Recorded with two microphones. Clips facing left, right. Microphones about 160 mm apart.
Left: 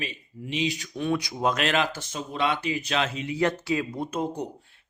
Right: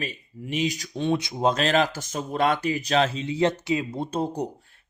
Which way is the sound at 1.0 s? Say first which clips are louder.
Right 3 dB; 25° right (ahead or behind).